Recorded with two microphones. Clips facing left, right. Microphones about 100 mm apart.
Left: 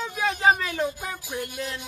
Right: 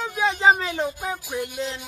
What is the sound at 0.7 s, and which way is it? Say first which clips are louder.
Speech: right 2 dB; 15° right (ahead or behind).